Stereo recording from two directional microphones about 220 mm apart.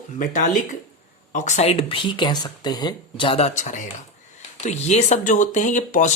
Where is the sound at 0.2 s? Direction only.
35° left (ahead or behind).